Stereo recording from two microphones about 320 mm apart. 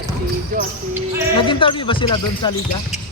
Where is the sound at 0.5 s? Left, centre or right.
Right.